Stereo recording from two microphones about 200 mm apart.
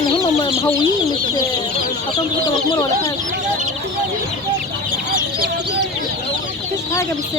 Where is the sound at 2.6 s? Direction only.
20° left (ahead or behind).